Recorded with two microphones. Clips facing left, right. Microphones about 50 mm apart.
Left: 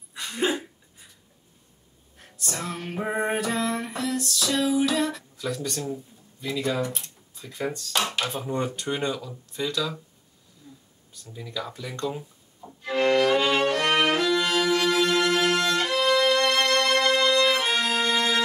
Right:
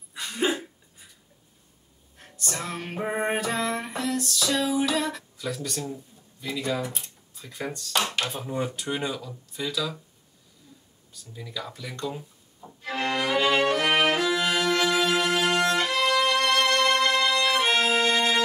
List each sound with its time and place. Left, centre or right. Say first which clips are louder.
0.1 s a sound: even; centre
2.1 s music: even; centre
6.4 s speech: left 2 dB; centre
11.3 s music: left 2 dB; centre